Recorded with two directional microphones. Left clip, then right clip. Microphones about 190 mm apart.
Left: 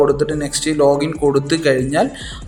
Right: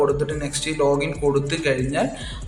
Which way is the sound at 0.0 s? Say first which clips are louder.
Left 6 dB; 25° left (ahead or behind).